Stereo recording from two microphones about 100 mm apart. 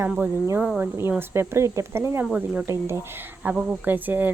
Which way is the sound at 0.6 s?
10° right (ahead or behind).